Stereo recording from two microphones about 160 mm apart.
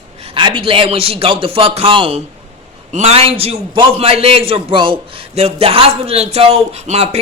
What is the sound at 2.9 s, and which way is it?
A man's voice, 45° right (ahead or behind).